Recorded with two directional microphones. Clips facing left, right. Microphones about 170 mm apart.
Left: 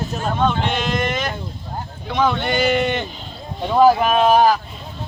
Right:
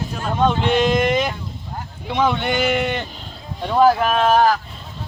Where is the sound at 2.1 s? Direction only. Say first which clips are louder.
Even; 10° right (ahead or behind); by 4.6 s 10° left (ahead or behind).